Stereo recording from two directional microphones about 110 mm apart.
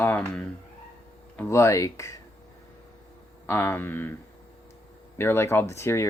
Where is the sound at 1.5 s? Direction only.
30° left (ahead or behind).